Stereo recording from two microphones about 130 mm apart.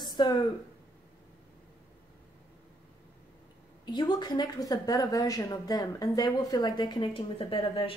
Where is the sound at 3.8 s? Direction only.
35° left (ahead or behind).